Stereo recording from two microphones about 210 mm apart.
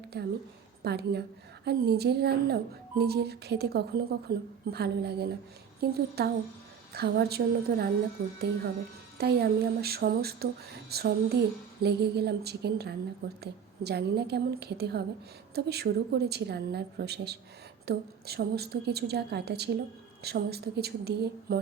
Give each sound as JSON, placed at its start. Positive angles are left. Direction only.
{"t": 0.1, "sound": "speech", "side_deg": -50}